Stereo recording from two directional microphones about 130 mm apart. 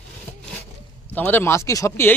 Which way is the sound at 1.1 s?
15° left (ahead or behind).